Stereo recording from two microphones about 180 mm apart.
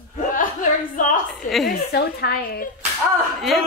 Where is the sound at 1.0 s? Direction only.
45° left (ahead or behind).